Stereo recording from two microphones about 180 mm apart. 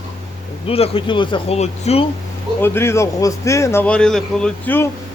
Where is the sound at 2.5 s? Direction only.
15° left (ahead or behind).